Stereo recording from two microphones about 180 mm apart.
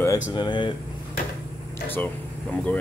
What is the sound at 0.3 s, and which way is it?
Speech, 25° left (ahead or behind).